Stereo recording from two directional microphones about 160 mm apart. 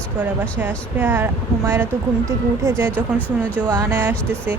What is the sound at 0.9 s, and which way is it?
Speech, 10° right (ahead or behind).